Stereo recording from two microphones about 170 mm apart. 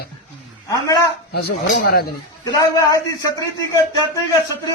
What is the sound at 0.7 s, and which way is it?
Speech, 20° left (ahead or behind).